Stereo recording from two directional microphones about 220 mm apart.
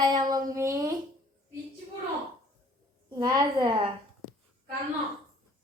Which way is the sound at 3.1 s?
20° right (ahead or behind).